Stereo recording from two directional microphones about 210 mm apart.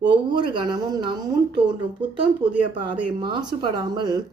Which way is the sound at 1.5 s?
5° right (ahead or behind).